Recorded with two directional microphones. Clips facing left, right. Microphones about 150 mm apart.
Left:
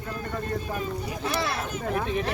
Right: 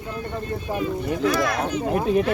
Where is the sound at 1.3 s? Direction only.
30° left (ahead or behind).